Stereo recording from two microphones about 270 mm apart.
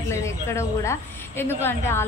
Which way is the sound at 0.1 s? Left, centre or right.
Centre.